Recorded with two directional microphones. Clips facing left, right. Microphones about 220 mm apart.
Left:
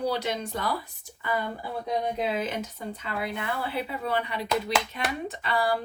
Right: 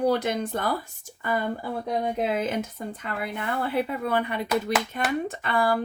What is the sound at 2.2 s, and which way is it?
Speech, 50° right (ahead or behind).